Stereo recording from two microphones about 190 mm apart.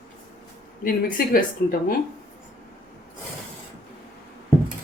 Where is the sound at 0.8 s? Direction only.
50° left (ahead or behind).